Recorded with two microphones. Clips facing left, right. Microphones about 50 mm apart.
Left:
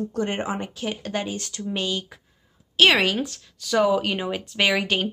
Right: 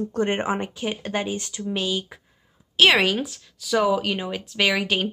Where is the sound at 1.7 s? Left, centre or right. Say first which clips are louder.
Right 1 dB; centre.